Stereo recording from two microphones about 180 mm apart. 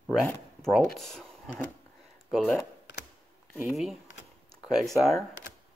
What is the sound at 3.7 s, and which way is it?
Speech, centre (ahead or behind).